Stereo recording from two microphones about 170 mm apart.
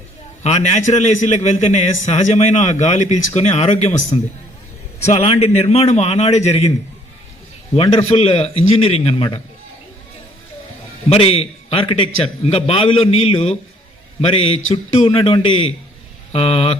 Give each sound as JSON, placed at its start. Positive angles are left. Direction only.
{"t": 0.4, "sound": "a man's voice", "side_deg": 40}
{"t": 7.8, "sound": "a man's voice", "side_deg": 35}
{"t": 11.1, "sound": "a man's voice", "side_deg": 35}